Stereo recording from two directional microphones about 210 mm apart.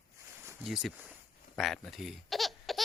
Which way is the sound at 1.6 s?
Centre (ahead or behind).